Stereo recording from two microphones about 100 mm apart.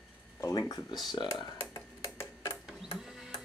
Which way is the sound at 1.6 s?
30° left (ahead or behind).